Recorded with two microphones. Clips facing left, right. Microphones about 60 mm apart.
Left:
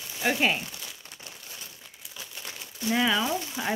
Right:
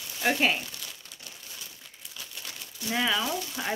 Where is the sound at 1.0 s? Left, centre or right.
Left.